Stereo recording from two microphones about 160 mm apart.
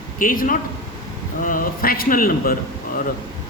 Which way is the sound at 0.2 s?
60° left (ahead or behind).